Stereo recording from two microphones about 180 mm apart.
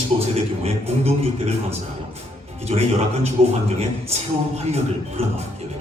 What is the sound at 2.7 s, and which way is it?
A man's voice, 35° right (ahead or behind).